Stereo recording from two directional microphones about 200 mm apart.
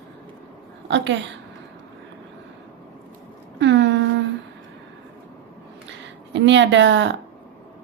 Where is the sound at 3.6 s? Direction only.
65° right (ahead or behind).